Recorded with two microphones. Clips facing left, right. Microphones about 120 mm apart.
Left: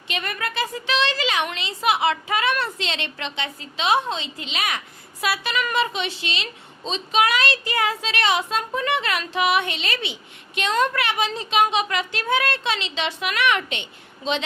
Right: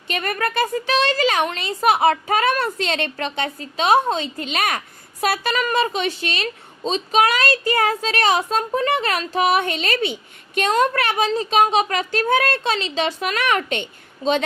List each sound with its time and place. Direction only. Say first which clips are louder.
0.1 s a woman's voice: right 5 dB; 45° right (ahead or behind)